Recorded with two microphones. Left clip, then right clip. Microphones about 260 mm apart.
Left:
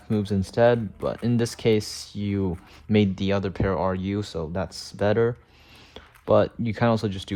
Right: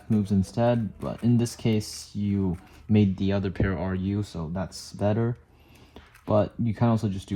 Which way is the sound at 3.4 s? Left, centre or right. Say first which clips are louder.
Left 5 dB; centre.